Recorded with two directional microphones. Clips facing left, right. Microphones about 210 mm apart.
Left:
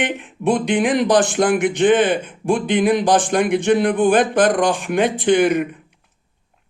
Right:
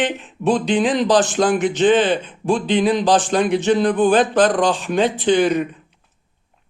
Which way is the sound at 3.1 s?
55° left (ahead or behind).